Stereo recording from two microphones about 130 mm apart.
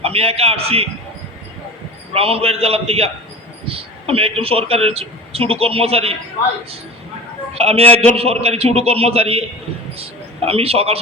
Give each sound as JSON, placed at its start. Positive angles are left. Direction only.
{"t": 0.0, "sound": "a man's voice", "side_deg": -50}
{"t": 2.1, "sound": "a man's voice", "side_deg": -50}
{"t": 7.5, "sound": "a man's voice", "side_deg": -50}